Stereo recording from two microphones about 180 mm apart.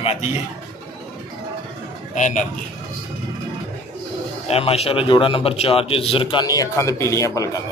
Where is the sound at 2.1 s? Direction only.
45° left (ahead or behind).